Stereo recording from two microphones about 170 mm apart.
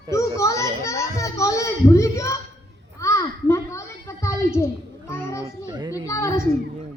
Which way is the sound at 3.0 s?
15° left (ahead or behind).